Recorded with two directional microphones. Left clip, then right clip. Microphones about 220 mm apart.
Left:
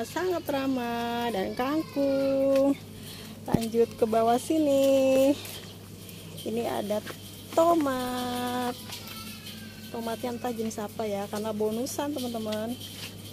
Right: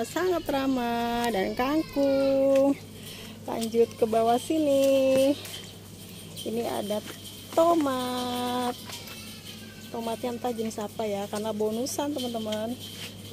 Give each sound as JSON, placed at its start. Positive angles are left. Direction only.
{"t": 0.1, "sound": "speech", "side_deg": -15}
{"t": 6.5, "sound": "speech", "side_deg": 5}
{"t": 9.9, "sound": "speech", "side_deg": -5}